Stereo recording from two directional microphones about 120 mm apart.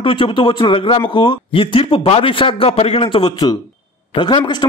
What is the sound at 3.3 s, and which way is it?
Speech, 30° left (ahead or behind).